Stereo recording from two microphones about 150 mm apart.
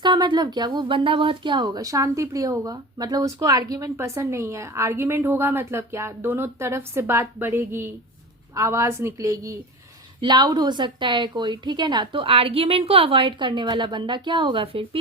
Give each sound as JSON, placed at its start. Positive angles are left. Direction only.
{"t": 0.0, "sound": "a woman's voice", "side_deg": -30}